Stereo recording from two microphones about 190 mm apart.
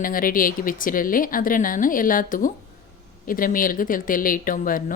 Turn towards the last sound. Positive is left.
turn(degrees=45)  # may be behind; listen again after turning